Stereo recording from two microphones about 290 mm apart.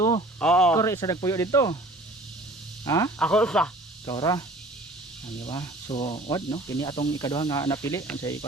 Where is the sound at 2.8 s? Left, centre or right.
Centre.